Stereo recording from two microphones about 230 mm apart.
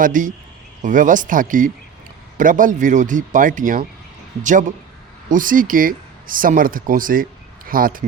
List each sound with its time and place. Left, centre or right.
0.0 s speech: right